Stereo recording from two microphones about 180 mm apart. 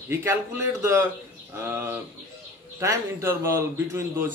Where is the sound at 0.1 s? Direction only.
15° right (ahead or behind).